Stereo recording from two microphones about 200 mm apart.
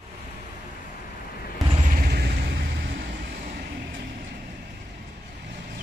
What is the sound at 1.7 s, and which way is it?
Vehicle, 40° right (ahead or behind).